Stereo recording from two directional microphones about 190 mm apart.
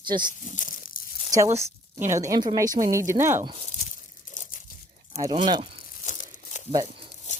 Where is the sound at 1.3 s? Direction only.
15° right (ahead or behind).